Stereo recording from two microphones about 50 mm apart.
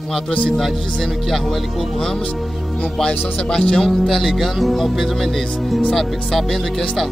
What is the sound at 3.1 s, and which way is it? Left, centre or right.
Speech, centre.